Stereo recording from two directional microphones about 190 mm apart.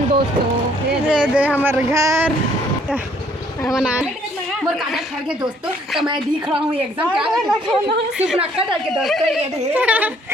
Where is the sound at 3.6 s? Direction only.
5° right (ahead or behind).